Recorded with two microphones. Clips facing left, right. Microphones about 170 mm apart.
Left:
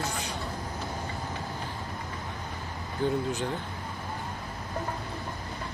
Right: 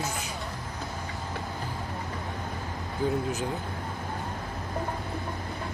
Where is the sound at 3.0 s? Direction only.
Centre (ahead or behind).